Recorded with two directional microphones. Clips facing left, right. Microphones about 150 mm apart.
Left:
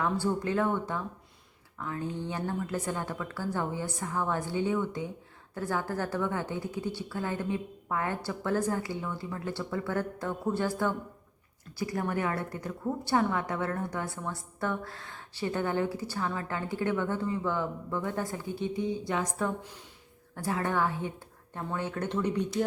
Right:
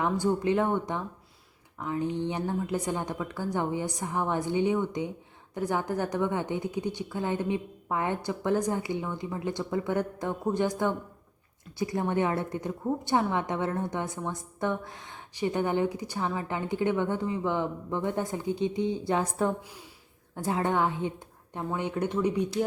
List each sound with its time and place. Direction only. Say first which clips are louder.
0.0 s a woman's voice: right 3 dB; 20° right (ahead or behind)